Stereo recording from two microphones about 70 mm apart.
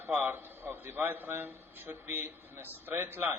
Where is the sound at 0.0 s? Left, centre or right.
Right.